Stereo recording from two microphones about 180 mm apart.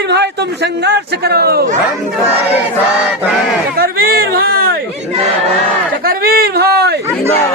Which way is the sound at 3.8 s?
55° right (ahead or behind).